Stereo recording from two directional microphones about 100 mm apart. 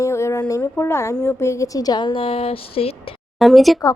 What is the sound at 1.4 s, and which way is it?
Speech, 30° left (ahead or behind).